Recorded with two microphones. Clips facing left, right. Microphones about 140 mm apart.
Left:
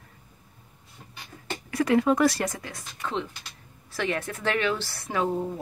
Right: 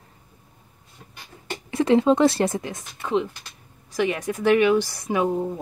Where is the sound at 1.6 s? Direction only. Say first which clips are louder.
Right 4 dB; 25° right (ahead or behind).